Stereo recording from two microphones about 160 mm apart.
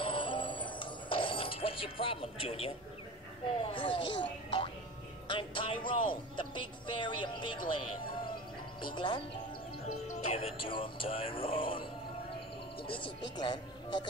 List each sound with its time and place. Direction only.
0.0 s music: 30° left (ahead or behind)
3.6 s speech: 30° left (ahead or behind)
5.3 s speech: 30° left (ahead or behind)
10.2 s speech: 40° left (ahead or behind)
12.8 s speech: 35° left (ahead or behind)